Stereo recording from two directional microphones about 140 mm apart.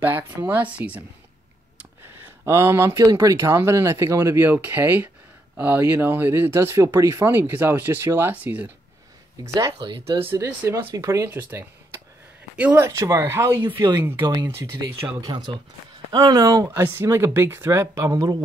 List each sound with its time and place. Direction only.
0.0 s speech: 15° right (ahead or behind)
1.8 s a sound: 15° right (ahead or behind)
3.1 s speech: 25° right (ahead or behind)
10.2 s speech: 15° right (ahead or behind)